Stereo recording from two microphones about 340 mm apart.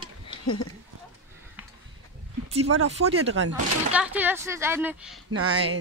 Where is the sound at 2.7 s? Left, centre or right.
Right.